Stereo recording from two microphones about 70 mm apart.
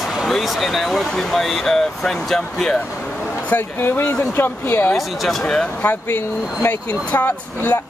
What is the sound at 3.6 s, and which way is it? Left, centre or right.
Speech, left.